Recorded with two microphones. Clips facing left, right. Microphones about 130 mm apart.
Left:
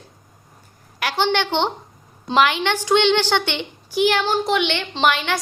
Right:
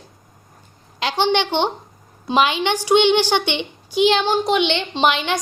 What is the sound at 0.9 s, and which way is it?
A woman's voice, 20° right (ahead or behind).